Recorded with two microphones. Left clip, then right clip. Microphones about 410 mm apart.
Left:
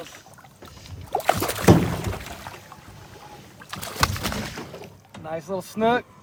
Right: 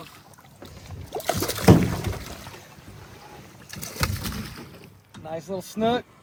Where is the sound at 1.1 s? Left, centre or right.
Centre.